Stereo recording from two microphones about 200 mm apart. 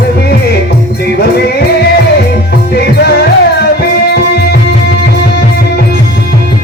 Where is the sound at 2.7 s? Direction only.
55° left (ahead or behind).